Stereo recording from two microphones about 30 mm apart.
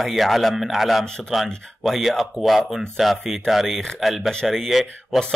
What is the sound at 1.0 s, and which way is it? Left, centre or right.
Speech, centre.